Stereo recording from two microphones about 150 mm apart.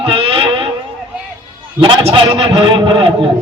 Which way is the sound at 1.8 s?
40° right (ahead or behind).